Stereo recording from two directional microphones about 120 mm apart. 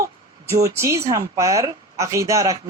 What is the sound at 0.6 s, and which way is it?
Speech, 25° right (ahead or behind).